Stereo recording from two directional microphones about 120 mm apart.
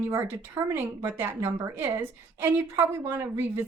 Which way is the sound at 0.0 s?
20° right (ahead or behind).